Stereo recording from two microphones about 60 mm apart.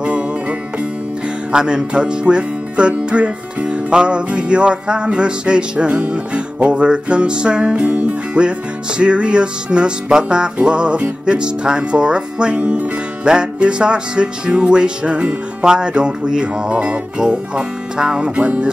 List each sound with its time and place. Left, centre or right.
0.0 s music: right